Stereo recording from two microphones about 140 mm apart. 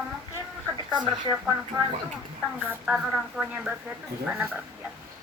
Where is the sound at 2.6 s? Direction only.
10° right (ahead or behind).